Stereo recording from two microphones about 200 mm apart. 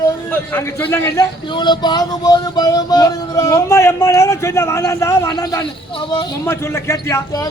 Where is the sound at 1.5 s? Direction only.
20° left (ahead or behind).